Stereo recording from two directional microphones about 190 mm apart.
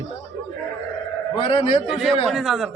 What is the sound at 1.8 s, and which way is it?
Speech, centre (ahead or behind).